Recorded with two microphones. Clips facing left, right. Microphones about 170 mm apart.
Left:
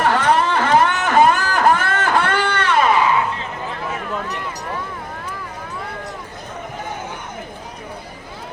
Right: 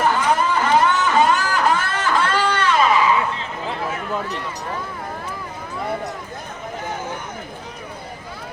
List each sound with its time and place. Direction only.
0.0 s music: 75° left (ahead or behind)